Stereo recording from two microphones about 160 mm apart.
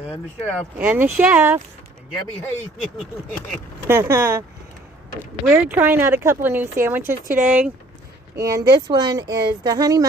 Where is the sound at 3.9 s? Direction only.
15° right (ahead or behind).